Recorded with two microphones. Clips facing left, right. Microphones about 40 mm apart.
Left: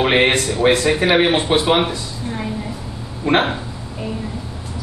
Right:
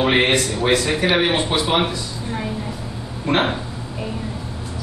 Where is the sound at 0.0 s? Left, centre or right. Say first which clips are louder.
Left 2 dB; left.